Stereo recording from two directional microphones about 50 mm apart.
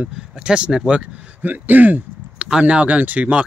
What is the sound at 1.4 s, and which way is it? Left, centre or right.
Speech, right.